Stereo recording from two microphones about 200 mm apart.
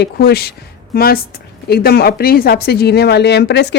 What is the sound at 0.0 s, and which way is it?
Speech, 50° left (ahead or behind).